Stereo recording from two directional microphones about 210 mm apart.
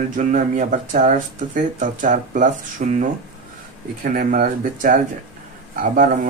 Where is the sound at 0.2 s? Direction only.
40° right (ahead or behind).